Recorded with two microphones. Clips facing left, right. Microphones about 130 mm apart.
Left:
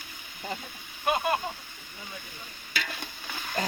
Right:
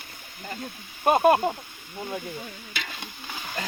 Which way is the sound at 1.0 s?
50° right (ahead or behind).